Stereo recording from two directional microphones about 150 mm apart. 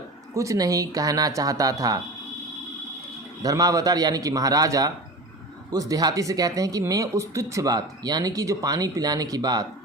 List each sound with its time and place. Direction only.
0.3 s speech: 20° right (ahead or behind)
3.4 s speech: 25° right (ahead or behind)